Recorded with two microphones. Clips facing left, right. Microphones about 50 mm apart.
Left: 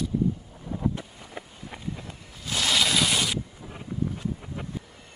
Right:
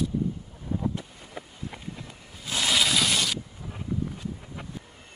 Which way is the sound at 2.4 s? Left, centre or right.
Centre.